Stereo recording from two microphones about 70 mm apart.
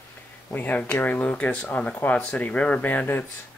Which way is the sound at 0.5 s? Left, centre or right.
Left.